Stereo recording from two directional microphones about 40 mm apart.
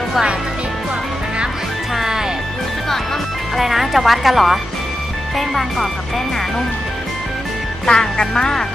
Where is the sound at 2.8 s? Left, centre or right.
Centre.